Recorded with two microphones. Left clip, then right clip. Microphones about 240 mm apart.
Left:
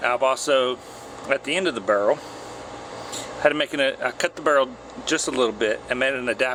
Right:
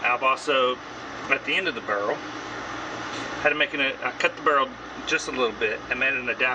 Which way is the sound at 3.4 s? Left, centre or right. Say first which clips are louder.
Left 2 dB; left.